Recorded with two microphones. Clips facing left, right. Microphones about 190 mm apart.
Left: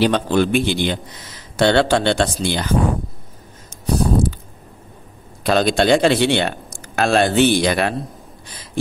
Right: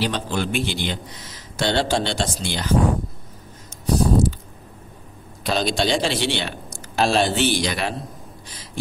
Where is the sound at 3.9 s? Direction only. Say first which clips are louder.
Left 1 dB; 55° left (ahead or behind).